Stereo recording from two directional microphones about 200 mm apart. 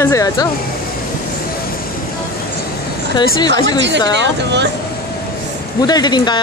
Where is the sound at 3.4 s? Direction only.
20° left (ahead or behind).